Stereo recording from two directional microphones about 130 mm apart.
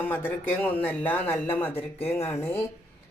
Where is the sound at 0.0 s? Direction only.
15° left (ahead or behind).